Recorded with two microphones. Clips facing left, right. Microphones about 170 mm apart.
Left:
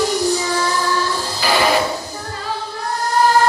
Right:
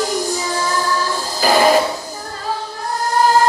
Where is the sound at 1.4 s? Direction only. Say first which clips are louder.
Right 4 dB; 45° right (ahead or behind).